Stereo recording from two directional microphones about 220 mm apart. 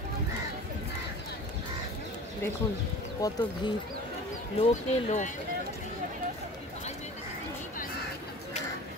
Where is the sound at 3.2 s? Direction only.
15° left (ahead or behind).